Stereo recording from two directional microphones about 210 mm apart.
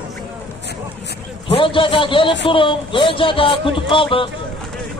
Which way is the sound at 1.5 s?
25° left (ahead or behind).